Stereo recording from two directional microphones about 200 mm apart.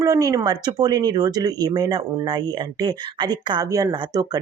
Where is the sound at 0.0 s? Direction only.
15° right (ahead or behind).